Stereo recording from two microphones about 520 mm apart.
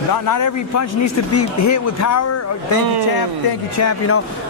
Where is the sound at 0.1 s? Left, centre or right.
Left.